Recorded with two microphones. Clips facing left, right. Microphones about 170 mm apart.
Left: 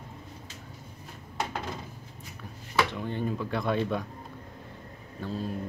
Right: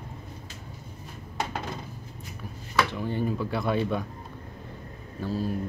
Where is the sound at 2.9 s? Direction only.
5° right (ahead or behind).